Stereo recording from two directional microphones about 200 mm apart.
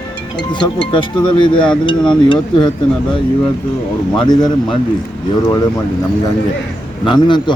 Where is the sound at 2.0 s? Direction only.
25° left (ahead or behind).